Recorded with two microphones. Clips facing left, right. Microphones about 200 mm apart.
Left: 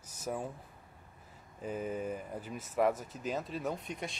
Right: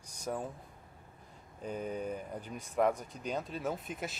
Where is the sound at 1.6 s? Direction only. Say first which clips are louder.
Left 1 dB; 5° left (ahead or behind).